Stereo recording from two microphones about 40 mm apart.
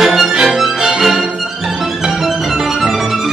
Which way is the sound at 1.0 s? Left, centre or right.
Centre.